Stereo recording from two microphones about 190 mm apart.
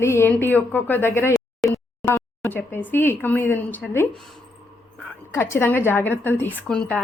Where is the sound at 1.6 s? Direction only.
Centre (ahead or behind).